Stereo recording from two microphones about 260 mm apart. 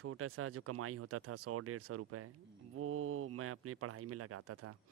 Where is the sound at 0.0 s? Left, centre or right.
Right.